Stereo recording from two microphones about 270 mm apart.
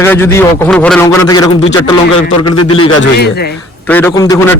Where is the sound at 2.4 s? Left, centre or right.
Left.